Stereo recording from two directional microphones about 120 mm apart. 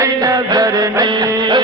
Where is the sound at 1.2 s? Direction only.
35° right (ahead or behind).